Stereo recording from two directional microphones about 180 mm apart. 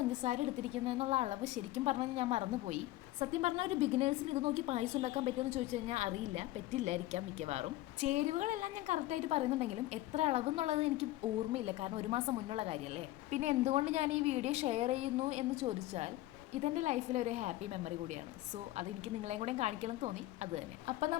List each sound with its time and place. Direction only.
0.1 s a woman's voice: 40° right (ahead or behind)
19.3 s a woman's voice: 40° right (ahead or behind)